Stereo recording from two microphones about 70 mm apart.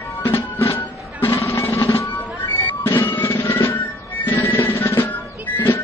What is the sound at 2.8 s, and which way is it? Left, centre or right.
Music, left.